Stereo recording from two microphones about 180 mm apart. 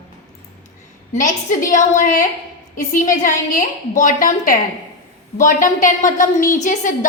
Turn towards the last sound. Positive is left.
turn(degrees=45)  # may be behind; listen again after turning